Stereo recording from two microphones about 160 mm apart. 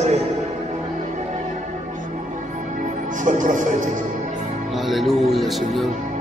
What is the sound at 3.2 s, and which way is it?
Speech, 55° right (ahead or behind).